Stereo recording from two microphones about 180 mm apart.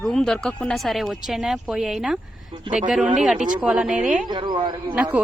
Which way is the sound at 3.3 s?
45° right (ahead or behind).